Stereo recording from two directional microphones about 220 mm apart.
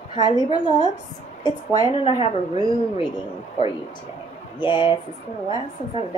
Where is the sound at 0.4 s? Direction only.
20° left (ahead or behind).